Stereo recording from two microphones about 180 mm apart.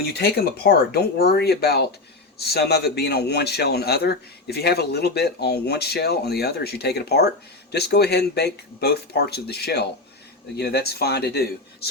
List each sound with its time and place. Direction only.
0.1 s a man's voice: 60° left (ahead or behind)